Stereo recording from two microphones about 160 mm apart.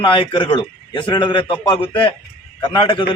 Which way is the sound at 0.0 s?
30° left (ahead or behind).